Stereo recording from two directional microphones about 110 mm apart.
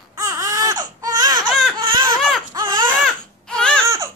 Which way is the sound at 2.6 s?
35° right (ahead or behind).